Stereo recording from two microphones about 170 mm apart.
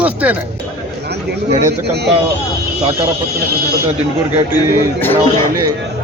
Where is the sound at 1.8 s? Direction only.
80° right.